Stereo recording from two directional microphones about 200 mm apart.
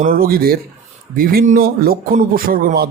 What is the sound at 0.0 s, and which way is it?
Speech, 45° right (ahead or behind).